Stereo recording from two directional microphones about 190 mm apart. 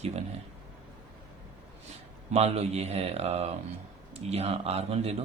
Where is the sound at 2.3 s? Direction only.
35° right (ahead or behind).